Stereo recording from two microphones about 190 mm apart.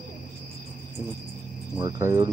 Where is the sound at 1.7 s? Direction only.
20° right (ahead or behind).